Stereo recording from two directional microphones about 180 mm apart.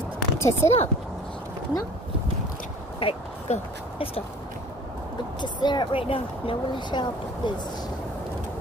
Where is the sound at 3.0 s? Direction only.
30° left (ahead or behind).